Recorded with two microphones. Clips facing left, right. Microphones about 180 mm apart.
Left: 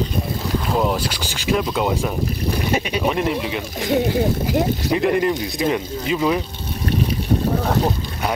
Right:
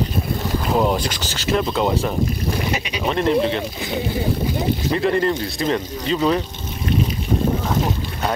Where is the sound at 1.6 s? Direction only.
Centre (ahead or behind).